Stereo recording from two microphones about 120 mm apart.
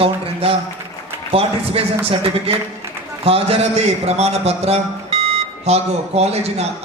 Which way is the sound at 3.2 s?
55° right (ahead or behind).